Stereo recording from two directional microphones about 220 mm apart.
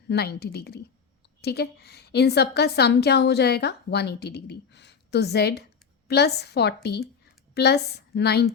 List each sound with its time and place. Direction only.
0.1 s a woman's voice: 45° left (ahead or behind)